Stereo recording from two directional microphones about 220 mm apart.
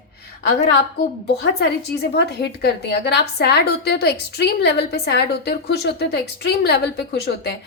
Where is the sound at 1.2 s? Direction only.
50° left (ahead or behind).